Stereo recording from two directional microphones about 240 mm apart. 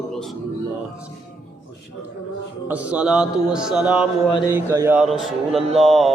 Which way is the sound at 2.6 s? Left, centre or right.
Centre.